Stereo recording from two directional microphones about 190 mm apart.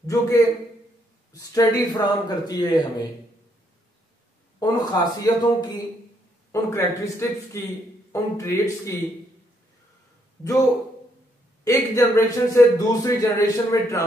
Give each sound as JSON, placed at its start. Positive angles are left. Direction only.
{"t": 0.0, "sound": "a man's voice", "side_deg": 15}
{"t": 4.6, "sound": "a man's voice", "side_deg": 20}
{"t": 11.6, "sound": "a man's voice", "side_deg": 15}